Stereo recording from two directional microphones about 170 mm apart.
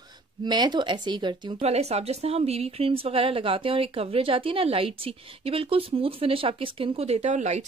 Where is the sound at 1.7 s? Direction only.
40° right (ahead or behind).